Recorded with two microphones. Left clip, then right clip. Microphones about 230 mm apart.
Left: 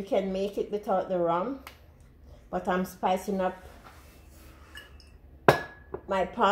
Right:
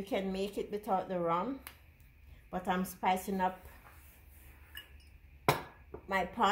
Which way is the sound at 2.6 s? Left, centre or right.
Right.